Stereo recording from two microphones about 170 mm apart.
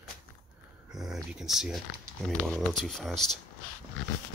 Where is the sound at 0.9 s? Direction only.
Centre (ahead or behind).